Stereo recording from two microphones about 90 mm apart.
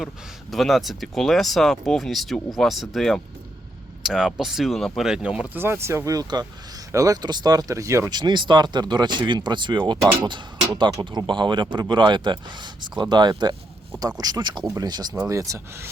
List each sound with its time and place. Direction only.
0.5 s speech: centre (ahead or behind)
5.5 s speech: 25° right (ahead or behind)
8.1 s speech: 60° right (ahead or behind)
15.3 s speech: 35° right (ahead or behind)